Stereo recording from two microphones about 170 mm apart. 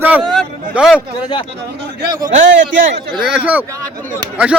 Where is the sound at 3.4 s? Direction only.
10° right (ahead or behind).